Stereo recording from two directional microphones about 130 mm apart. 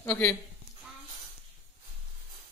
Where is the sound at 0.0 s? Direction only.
20° left (ahead or behind).